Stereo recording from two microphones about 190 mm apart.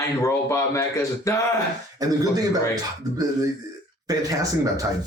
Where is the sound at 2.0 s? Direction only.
20° right (ahead or behind).